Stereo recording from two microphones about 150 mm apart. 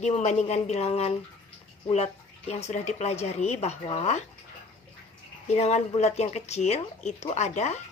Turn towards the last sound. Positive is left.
turn(degrees=50)  # may be behind; listen again after turning